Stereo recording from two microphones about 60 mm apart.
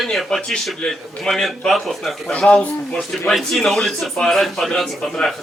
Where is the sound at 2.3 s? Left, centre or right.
Centre.